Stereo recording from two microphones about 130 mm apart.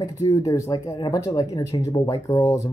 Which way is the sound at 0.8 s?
35° left (ahead or behind).